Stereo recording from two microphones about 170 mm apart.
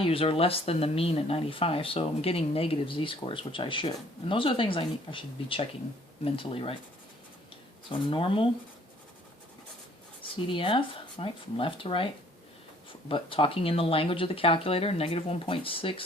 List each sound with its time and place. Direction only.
0.0 s speech: 35° left (ahead or behind)
7.9 s speech: 30° left (ahead or behind)
10.5 s speech: 30° left (ahead or behind)
13.1 s speech: 30° left (ahead or behind)